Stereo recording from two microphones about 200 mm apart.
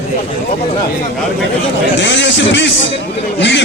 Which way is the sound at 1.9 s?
65° left (ahead or behind).